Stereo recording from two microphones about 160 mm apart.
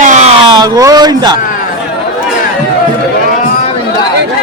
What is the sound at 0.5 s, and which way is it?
Speech, 25° right (ahead or behind).